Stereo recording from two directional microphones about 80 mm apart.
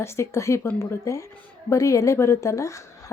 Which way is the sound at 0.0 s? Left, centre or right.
Left.